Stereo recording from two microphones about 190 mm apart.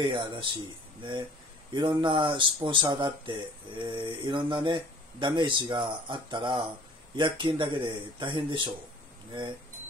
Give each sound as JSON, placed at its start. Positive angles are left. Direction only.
{"t": 0.0, "sound": "speech", "side_deg": -25}
{"t": 1.7, "sound": "speech", "side_deg": -25}